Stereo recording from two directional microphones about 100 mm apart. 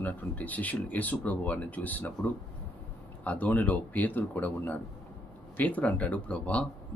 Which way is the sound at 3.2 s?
15° left (ahead or behind).